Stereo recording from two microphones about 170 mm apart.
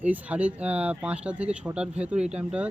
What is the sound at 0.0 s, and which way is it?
A man's voice, 10° right (ahead or behind).